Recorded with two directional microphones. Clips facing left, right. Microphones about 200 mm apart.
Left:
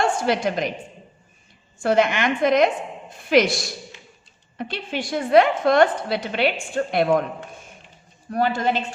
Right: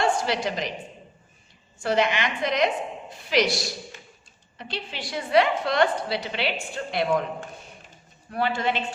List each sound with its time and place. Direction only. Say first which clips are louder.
0.0 s a woman's voice: left 3 dB; 50° left (ahead or behind)
1.8 s a woman's voice: left 4 dB; 50° left (ahead or behind)
8.3 s a woman's voice: left 4 dB; 45° left (ahead or behind)